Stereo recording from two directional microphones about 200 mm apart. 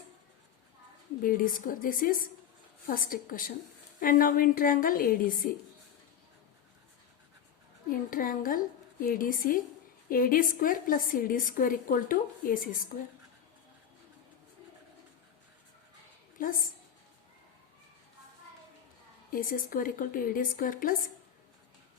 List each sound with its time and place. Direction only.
1.2 s a woman's voice: 45° left (ahead or behind)
7.9 s a woman's voice: 45° left (ahead or behind)
16.4 s a woman's voice: 45° left (ahead or behind)
19.3 s a woman's voice: 45° left (ahead or behind)